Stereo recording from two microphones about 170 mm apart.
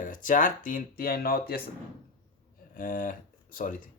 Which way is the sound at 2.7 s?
50° left (ahead or behind).